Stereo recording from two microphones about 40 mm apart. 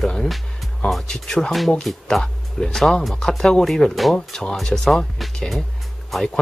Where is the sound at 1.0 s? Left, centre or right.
Centre.